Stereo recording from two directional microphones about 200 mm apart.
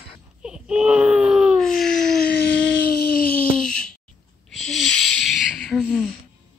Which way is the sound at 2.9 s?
50° left (ahead or behind).